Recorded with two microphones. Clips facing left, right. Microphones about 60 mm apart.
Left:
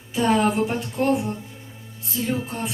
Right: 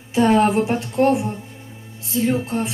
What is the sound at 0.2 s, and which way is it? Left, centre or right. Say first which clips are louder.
Speech: right 4 dB; right.